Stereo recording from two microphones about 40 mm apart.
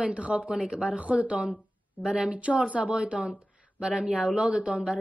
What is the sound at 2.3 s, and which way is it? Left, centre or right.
A woman's voice, right.